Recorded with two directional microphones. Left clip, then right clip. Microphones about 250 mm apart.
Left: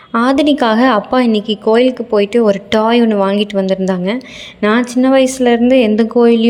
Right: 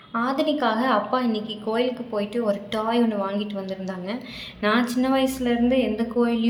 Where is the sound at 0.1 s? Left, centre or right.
Left.